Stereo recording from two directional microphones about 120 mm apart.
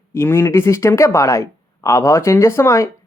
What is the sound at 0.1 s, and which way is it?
Speech, 20° left (ahead or behind).